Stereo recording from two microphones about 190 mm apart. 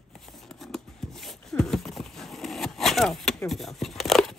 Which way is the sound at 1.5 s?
5° left (ahead or behind).